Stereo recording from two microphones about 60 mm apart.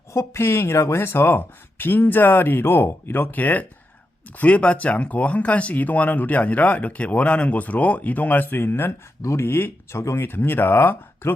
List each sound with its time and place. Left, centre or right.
0.1 s speech: left
9.2 s speech: left
10.2 s speech: left